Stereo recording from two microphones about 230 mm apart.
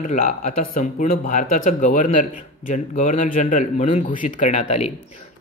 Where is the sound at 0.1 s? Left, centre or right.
Left.